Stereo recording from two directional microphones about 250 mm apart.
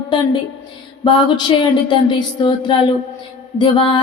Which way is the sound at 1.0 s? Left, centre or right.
Centre.